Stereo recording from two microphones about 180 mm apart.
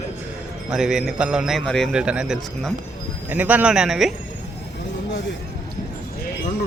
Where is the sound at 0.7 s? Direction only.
5° right (ahead or behind).